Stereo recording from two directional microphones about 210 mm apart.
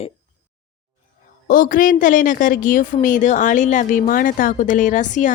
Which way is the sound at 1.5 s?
40° left (ahead or behind).